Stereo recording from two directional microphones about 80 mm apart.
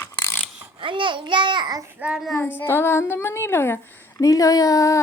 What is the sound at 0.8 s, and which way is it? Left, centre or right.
A child's voice, right.